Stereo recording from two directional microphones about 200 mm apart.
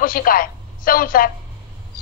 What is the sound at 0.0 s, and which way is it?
A woman's voice, 45° left (ahead or behind).